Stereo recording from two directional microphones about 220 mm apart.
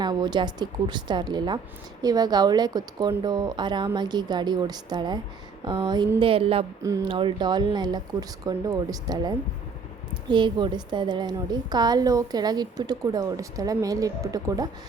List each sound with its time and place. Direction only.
0.0 s a woman's voice: 20° right (ahead or behind)